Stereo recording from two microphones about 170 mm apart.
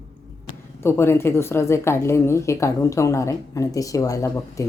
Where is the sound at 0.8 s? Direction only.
15° left (ahead or behind).